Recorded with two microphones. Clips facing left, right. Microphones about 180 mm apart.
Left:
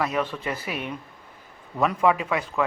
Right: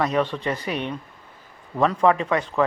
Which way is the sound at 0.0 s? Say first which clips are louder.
Right 4 dB; 5° left (ahead or behind).